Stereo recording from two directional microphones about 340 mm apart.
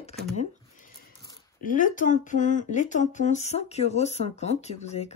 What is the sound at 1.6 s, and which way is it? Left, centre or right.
Speech, left.